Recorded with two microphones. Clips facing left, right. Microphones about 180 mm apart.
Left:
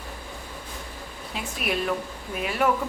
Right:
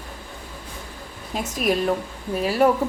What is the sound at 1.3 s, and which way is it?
A woman's voice, 40° right (ahead or behind).